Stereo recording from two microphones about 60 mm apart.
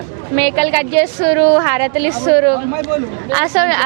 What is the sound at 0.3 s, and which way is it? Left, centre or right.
A woman's voice, centre.